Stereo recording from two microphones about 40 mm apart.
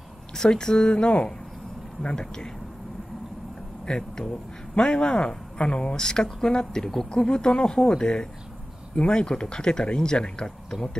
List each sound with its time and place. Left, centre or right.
0.3 s speech: centre
3.8 s speech: centre